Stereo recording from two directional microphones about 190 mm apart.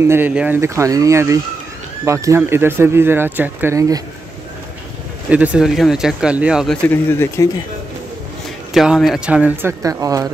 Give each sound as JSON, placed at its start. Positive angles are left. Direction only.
{"t": 0.0, "sound": "speech", "side_deg": -10}
{"t": 5.3, "sound": "speech", "side_deg": -5}
{"t": 6.9, "sound": "speech", "side_deg": 10}
{"t": 8.7, "sound": "speech", "side_deg": 0}